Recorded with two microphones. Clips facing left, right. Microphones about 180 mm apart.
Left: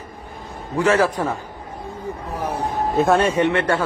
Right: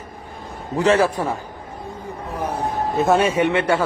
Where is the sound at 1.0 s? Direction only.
10° right (ahead or behind).